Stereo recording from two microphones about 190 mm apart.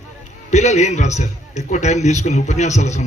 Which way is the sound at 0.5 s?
35° left (ahead or behind).